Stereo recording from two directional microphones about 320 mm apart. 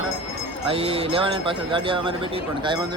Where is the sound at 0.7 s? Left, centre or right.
Centre.